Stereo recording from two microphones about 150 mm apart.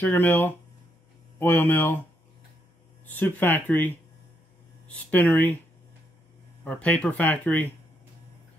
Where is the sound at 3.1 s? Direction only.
10° left (ahead or behind).